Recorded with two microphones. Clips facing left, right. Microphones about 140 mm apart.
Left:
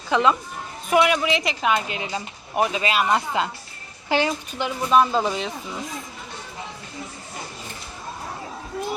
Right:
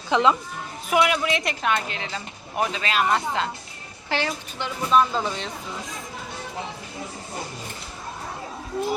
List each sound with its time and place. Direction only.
0.1 s a woman's voice: 20° right (ahead or behind)
0.9 s speech: centre (ahead or behind)